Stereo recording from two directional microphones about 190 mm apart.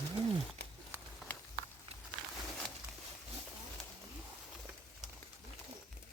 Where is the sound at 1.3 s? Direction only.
10° left (ahead or behind).